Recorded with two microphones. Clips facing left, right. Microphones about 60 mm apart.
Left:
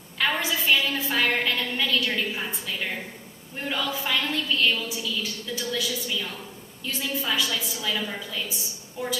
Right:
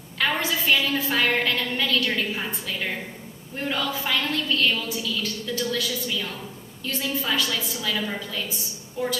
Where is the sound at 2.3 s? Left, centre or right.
Centre.